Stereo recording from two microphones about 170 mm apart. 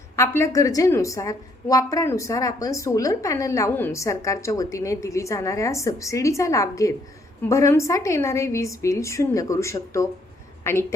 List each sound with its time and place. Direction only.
0.2 s a woman's voice: 15° left (ahead or behind)